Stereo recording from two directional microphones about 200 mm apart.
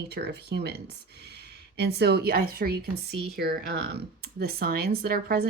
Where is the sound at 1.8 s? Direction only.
55° right (ahead or behind).